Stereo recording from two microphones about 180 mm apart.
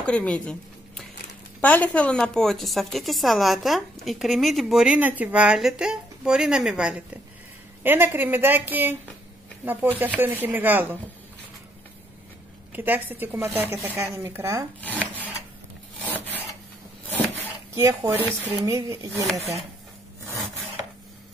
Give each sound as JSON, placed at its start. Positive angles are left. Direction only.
{"t": 0.0, "sound": "a woman's voice", "side_deg": 5}
{"t": 12.7, "sound": "speech", "side_deg": -10}
{"t": 14.8, "sound": "wood", "side_deg": 10}
{"t": 16.0, "sound": "filing", "side_deg": 10}
{"t": 17.7, "sound": "speech", "side_deg": -15}